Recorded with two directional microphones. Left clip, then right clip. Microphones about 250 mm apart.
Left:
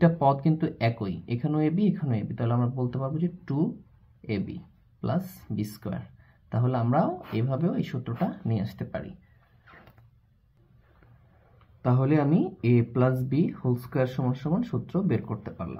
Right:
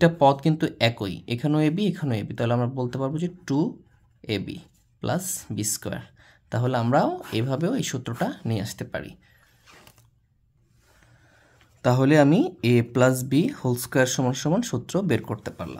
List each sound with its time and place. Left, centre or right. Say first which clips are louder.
0.0 s speech: right 5 dB; right
5.0 s speech: right 4 dB; right
11.8 s speech: right 7 dB; right